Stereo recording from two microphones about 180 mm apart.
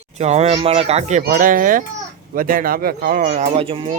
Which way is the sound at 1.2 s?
50° right (ahead or behind).